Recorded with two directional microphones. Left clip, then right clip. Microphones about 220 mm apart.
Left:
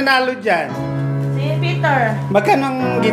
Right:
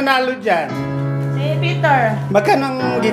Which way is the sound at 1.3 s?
25° right (ahead or behind).